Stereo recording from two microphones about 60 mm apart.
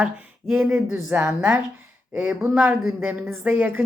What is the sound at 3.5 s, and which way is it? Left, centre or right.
Speech, right.